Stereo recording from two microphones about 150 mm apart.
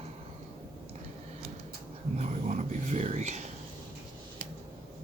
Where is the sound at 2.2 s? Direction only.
50° right (ahead or behind).